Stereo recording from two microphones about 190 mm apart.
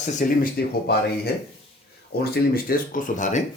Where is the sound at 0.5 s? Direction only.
55° left (ahead or behind); by 3.4 s 40° left (ahead or behind).